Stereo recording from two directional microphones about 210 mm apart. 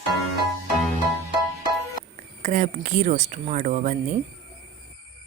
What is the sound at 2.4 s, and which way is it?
Speech, 35° right (ahead or behind).